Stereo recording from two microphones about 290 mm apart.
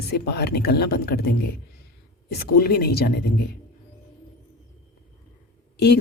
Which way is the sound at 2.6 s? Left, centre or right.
Left.